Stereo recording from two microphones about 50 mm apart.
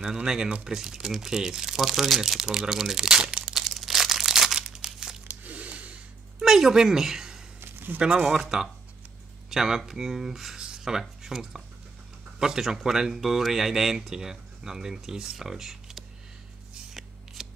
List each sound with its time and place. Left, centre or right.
0.2 s speech: centre
3.4 s crumpling: centre
5.3 s a sound: right
6.4 s a woman's voice: centre
10.6 s a sound: centre
12.4 s speech: centre
16.9 s scissors: centre